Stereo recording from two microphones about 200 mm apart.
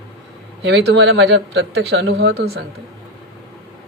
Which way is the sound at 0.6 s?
65° right (ahead or behind).